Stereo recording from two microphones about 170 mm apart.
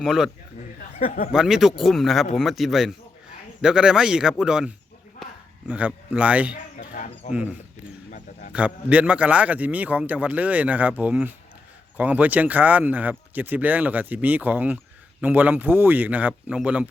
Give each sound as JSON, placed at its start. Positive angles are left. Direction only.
{"t": 0.0, "sound": "speech", "side_deg": -5}
{"t": 0.9, "sound": "speech", "side_deg": 45}
{"t": 1.3, "sound": "speech", "side_deg": -5}
{"t": 6.7, "sound": "speech", "side_deg": 50}
{"t": 8.1, "sound": "a sound", "side_deg": 45}
{"t": 8.5, "sound": "speech", "side_deg": -10}